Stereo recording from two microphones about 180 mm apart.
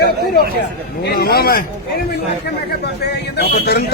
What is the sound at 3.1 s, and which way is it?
Speech, 65° left (ahead or behind).